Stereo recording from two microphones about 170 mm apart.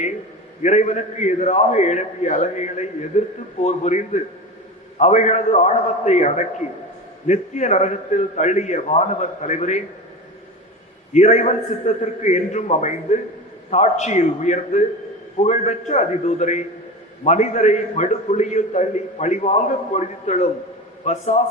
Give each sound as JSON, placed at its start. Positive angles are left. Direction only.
{"t": 0.6, "sound": "a man's voice", "side_deg": 45}
{"t": 11.1, "sound": "a man's voice", "side_deg": 45}